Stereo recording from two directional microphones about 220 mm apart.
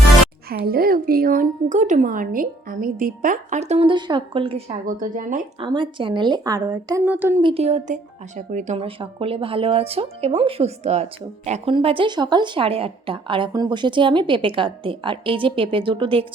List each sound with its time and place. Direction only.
0.5 s speech: 45° right (ahead or behind); by 4.8 s 25° right (ahead or behind)
4.9 s speech: 35° right (ahead or behind)
5.5 s speech: 20° right (ahead or behind)
7.4 s speech: 25° right (ahead or behind)